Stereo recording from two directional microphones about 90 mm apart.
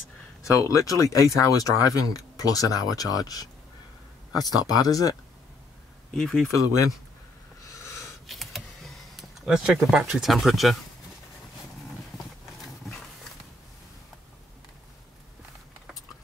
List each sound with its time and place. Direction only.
0.4 s speech: 35° left (ahead or behind)
4.7 s speech: 40° left (ahead or behind)
6.1 s speech: 5° left (ahead or behind)
6.5 s speech: 40° left (ahead or behind)
7.8 s a sound: 35° left (ahead or behind)
8.3 s computer keyboard: centre (ahead or behind)